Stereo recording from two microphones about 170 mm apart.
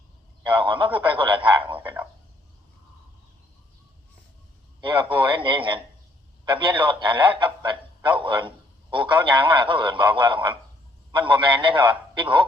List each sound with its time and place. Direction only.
0.4 s a man's voice: 30° right (ahead or behind)
0.9 s snicker: 30° right (ahead or behind)
4.8 s a man's voice: 30° right (ahead or behind)